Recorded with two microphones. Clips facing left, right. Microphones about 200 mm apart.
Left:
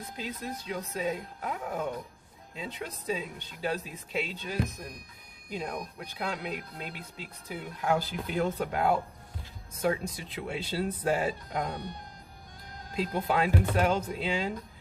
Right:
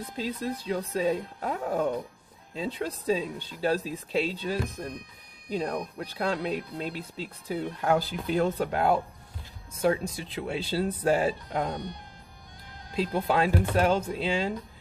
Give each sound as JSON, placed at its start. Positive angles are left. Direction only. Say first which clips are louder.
{"t": 0.2, "sound": "speech", "louder": "right 6 dB", "side_deg": -35}
{"t": 12.9, "sound": "speech", "louder": "right 3 dB", "side_deg": -30}